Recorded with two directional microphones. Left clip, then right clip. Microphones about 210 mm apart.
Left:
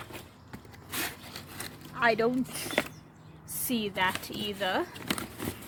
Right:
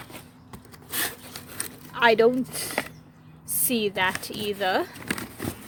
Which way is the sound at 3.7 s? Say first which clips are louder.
Right 5 dB; 40° right (ahead or behind).